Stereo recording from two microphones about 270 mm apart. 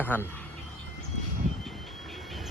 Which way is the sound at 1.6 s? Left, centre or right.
Centre.